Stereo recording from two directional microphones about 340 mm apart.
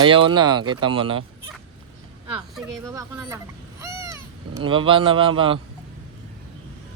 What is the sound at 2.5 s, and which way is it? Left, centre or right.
Speech, centre.